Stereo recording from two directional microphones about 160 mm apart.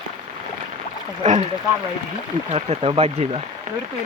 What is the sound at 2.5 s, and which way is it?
Speech, 40° right (ahead or behind).